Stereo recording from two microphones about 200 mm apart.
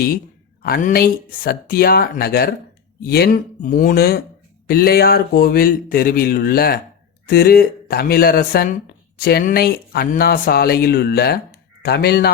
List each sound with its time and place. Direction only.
0.6 s speech: 45° left (ahead or behind)